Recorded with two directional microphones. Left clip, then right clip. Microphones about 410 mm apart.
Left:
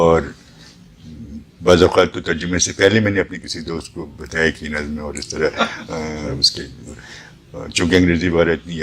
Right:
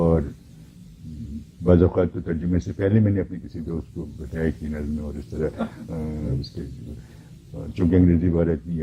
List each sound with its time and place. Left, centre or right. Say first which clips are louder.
0.0 s a sound: left 9 dB; centre
1.6 s a man's voice: left 8 dB; centre
7.6 s a man's voice: left 6 dB; centre